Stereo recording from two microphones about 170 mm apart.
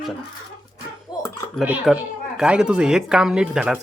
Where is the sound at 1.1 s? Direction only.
25° left (ahead or behind).